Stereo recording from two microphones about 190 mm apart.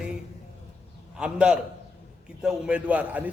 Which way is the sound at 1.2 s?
5° right (ahead or behind).